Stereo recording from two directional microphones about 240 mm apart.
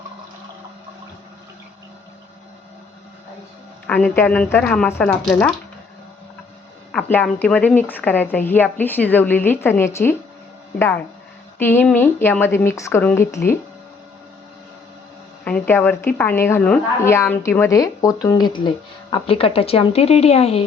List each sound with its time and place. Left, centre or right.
3.8 s speech: centre
6.9 s a woman's voice: centre
15.4 s a woman's voice: centre; by 20.7 s left